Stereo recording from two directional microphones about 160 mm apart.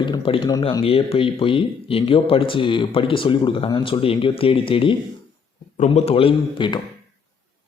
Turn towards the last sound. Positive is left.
turn(degrees=30)  # may be behind; listen again after turning